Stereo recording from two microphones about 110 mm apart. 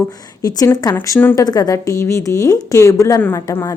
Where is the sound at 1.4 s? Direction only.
35° left (ahead or behind).